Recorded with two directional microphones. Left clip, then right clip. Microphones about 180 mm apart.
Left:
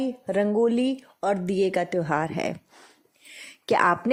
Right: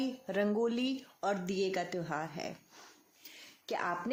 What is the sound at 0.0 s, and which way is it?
Speech, 35° left (ahead or behind).